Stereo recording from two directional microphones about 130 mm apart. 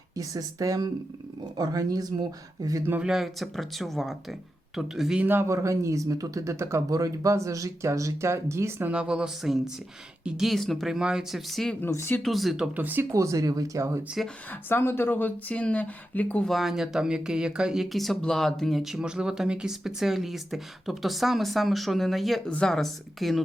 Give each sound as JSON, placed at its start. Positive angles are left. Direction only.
{"t": 0.2, "sound": "speech", "side_deg": -25}
{"t": 2.8, "sound": "speech", "side_deg": -15}
{"t": 3.1, "sound": "speech", "side_deg": 0}
{"t": 8.9, "sound": "speech", "side_deg": -10}
{"t": 11.8, "sound": "speech", "side_deg": 20}
{"t": 12.2, "sound": "speech", "side_deg": 0}
{"t": 14.5, "sound": "speech", "side_deg": 15}
{"t": 16.5, "sound": "speech", "side_deg": 0}